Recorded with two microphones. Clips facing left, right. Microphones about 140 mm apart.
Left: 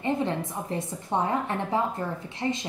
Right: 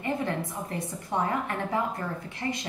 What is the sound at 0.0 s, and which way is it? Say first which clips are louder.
A woman's voice: left 3 dB; 20° left (ahead or behind).